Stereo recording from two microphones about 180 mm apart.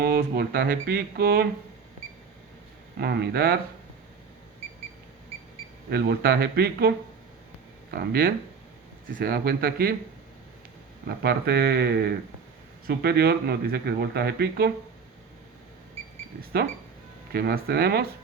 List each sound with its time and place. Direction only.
0.0 s speech: 55° right (ahead or behind)
3.0 s speech: 60° right (ahead or behind)
5.9 s speech: 60° right (ahead or behind)
11.0 s speech: 60° right (ahead or behind)
17.3 s speech: 60° right (ahead or behind)